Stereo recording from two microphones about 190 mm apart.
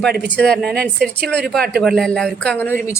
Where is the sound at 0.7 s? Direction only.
60° right (ahead or behind).